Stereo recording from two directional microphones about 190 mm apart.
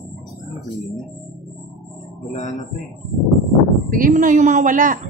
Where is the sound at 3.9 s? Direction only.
45° right (ahead or behind).